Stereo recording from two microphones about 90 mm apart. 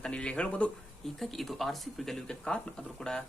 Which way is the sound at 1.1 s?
Centre (ahead or behind).